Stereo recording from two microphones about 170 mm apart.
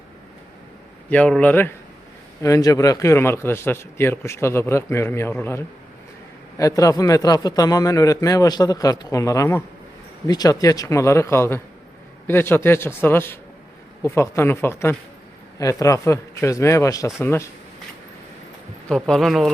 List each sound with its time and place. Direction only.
1.1 s a man's voice: 10° left (ahead or behind)
18.9 s speech: 5° left (ahead or behind)